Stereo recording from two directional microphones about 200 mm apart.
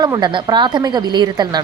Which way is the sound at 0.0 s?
20° right (ahead or behind).